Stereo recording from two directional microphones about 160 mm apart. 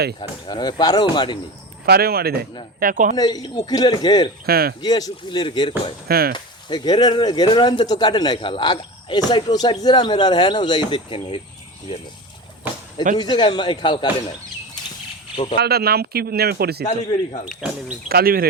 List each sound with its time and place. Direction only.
0.2 s speech: 30° left (ahead or behind)
1.9 s speech: 75° right (ahead or behind)
2.8 s speech: 55° right (ahead or behind)
3.2 s speech: 25° left (ahead or behind)
4.4 s speech: 75° right (ahead or behind)
4.8 s speech: 25° left (ahead or behind)
6.1 s speech: 75° right (ahead or behind)
6.3 s speech: 25° left (ahead or behind)
13.1 s speech: 30° left (ahead or behind)
15.5 s speech: 85° right
17.6 s speech: 5° right (ahead or behind)
18.1 s speech: 70° right (ahead or behind)